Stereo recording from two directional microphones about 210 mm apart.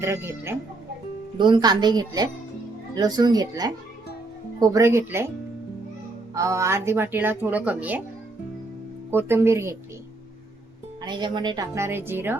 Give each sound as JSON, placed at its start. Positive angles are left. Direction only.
{"t": 0.0, "sound": "a woman's voice", "side_deg": -10}
{"t": 6.3, "sound": "a woman's voice", "side_deg": -15}
{"t": 9.0, "sound": "a woman's voice", "side_deg": -10}
{"t": 11.0, "sound": "a woman's voice", "side_deg": -20}